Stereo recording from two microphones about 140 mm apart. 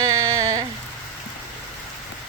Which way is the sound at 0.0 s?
25° right (ahead or behind).